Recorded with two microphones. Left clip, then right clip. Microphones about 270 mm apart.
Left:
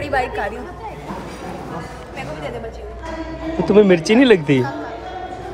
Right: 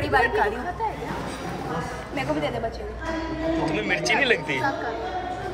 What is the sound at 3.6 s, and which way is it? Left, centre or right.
Speech, centre.